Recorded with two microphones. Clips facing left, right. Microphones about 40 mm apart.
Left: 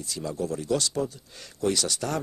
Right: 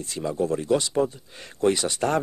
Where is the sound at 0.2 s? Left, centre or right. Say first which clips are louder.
Right 6 dB; right.